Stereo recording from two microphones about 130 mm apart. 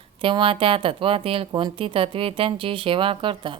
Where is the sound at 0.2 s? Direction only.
40° right (ahead or behind).